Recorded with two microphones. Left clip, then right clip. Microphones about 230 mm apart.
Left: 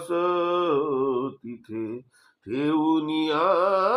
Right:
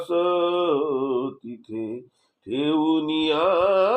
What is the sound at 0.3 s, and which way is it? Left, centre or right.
Mantra, left.